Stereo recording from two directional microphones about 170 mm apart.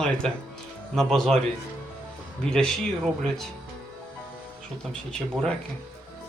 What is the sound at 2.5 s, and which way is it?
Speech, 5° left (ahead or behind).